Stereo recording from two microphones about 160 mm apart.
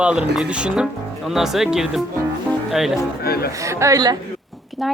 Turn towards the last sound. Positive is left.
turn(degrees=-20)  # may be behind; listen again after turning